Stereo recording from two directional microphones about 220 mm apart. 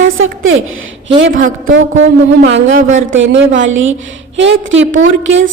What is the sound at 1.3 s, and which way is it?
Music, 35° right (ahead or behind).